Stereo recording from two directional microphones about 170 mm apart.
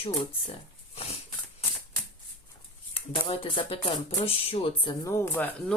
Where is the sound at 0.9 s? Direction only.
35° left (ahead or behind).